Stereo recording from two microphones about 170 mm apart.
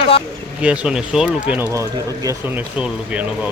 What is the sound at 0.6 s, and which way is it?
Speech, 5° right (ahead or behind).